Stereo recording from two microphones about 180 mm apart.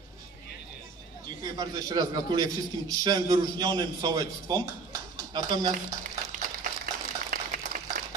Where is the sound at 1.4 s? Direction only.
20° right (ahead or behind).